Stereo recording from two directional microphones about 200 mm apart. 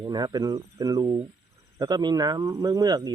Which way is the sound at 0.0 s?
20° right (ahead or behind).